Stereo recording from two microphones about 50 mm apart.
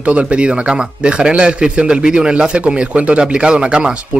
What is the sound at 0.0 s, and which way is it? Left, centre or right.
Speech, right.